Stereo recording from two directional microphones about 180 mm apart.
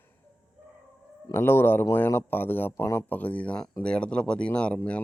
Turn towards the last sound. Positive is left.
turn(degrees=5)  # may be behind; listen again after turning